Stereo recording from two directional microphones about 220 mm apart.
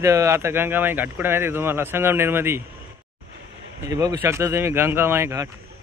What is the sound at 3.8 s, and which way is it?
Speech, 15° right (ahead or behind).